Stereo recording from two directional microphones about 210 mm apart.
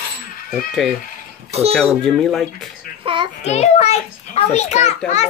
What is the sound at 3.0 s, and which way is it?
Child singing, 25° right (ahead or behind).